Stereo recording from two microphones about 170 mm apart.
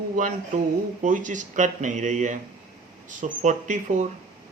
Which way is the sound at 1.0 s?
50° right (ahead or behind).